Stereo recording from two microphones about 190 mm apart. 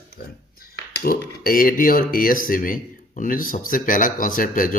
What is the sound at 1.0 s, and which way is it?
Speech, 50° left (ahead or behind).